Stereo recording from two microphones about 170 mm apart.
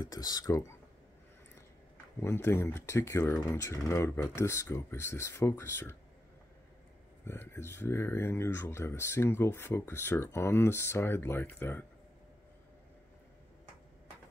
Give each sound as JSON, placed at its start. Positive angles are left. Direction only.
{"t": 0.0, "sound": "speech", "side_deg": 20}
{"t": 2.1, "sound": "speech", "side_deg": 15}
{"t": 7.2, "sound": "speech", "side_deg": 15}